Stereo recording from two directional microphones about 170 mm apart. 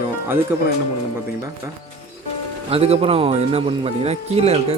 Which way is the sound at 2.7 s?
35° right (ahead or behind).